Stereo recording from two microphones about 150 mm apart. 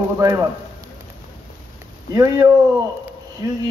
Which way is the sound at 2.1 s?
20° right (ahead or behind).